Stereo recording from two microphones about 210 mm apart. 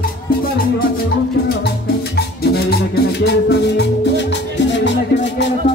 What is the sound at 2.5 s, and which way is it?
Music, 50° left (ahead or behind).